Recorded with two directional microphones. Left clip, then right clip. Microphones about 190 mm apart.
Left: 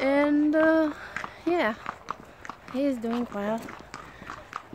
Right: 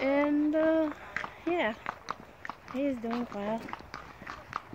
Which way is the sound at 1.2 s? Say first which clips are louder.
Right 3 dB; 10° right (ahead or behind).